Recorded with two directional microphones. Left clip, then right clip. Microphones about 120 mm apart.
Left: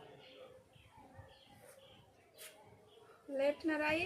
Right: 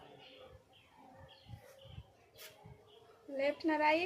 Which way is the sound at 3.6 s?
20° left (ahead or behind).